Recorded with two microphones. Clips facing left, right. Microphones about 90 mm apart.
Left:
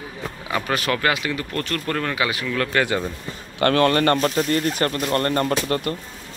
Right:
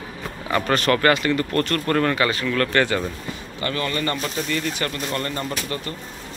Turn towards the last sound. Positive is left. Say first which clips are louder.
# left 6 dB
turn(degrees=50)  # may be behind; listen again after turning